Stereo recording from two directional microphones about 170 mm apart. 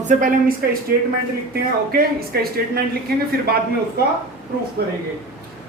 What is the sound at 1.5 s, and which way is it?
Speech, 65° right (ahead or behind).